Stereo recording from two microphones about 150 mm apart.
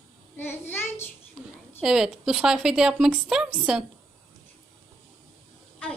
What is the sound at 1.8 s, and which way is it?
A woman's voice, 5° right (ahead or behind).